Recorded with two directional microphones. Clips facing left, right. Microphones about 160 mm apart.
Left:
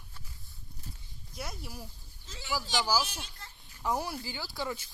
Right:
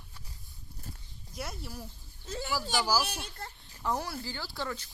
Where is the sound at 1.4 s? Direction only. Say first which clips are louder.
Right 1 dB; centre (ahead or behind).